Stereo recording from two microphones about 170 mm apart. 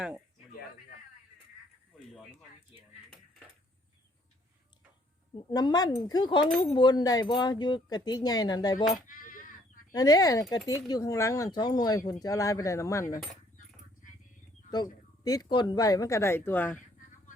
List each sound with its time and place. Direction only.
5.3 s speech: 25° left (ahead or behind)
9.0 s a sound: 55° left (ahead or behind)
9.9 s speech: 25° left (ahead or behind)
14.7 s speech: 25° left (ahead or behind)